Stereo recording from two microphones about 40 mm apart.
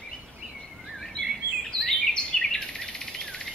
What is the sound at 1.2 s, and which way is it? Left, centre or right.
Bird vocalization, left.